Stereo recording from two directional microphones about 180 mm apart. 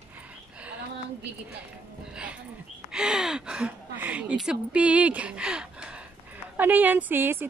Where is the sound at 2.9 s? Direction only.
5° right (ahead or behind).